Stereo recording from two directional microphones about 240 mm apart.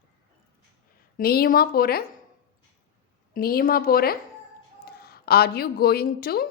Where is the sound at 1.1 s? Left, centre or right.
Left.